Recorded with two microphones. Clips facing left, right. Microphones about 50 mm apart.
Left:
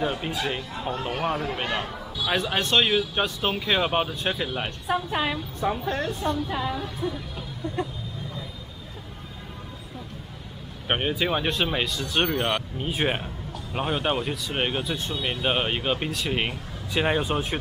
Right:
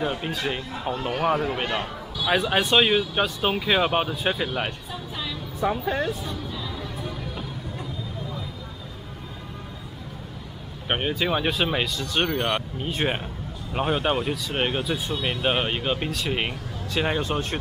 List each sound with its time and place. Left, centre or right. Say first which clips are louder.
0.0 s speech: even; centre
0.6 s a man's voice: right 1 dB; centre
4.8 s a woman's voice: left 8 dB; left
5.6 s a man's voice: right 3 dB; centre
6.2 s a woman's voice: left 6 dB; left
10.9 s speech: even; centre
16.9 s speech: left 1 dB; centre